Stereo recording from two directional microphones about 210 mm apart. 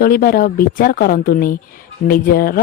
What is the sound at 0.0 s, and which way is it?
A woman's voice, 45° left (ahead or behind).